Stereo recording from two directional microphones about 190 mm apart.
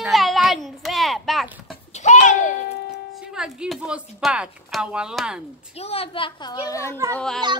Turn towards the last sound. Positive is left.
turn(degrees=5)  # may be behind; listen again after turning